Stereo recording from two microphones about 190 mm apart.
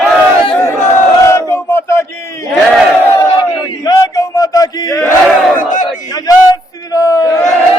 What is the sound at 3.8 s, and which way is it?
Chant, 20° left (ahead or behind).